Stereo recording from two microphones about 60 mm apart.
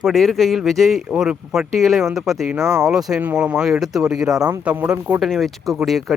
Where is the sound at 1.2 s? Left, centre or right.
Centre.